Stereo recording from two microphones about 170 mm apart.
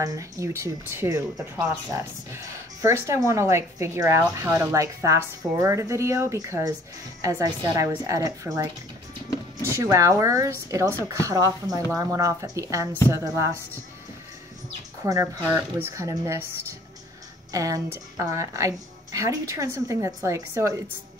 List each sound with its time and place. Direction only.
0.0 s a woman's voice: 20° right (ahead or behind)
15.0 s a woman's voice: 20° right (ahead or behind)
17.5 s a woman's voice: 20° right (ahead or behind)